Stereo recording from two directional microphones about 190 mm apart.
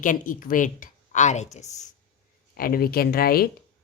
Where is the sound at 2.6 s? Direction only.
50° left (ahead or behind).